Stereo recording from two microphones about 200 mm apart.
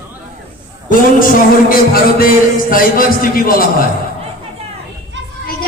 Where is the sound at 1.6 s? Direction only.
45° left (ahead or behind).